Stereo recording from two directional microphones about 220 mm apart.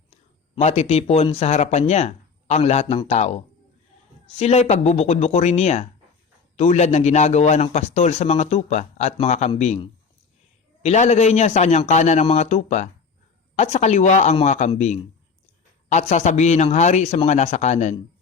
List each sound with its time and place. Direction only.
0.5 s a man's voice: 30° left (ahead or behind)